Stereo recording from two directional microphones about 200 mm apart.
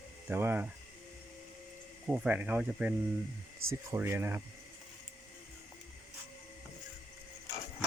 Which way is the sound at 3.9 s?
10° right (ahead or behind).